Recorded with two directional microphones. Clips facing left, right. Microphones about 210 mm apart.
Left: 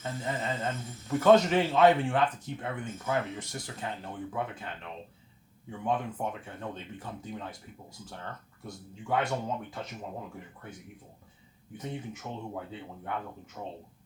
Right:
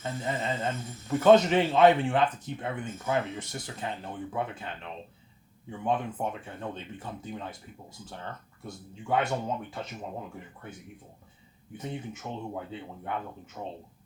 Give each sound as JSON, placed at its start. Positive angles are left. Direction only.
{"t": 0.0, "sound": "a man's voice", "side_deg": -20}
{"t": 5.8, "sound": "a man's voice", "side_deg": -25}
{"t": 8.6, "sound": "a man's voice", "side_deg": -25}
{"t": 11.8, "sound": "a man's voice", "side_deg": -20}